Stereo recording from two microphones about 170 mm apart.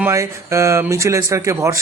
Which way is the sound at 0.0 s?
15° right (ahead or behind).